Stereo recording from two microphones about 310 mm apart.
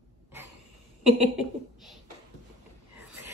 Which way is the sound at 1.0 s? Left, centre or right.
Centre.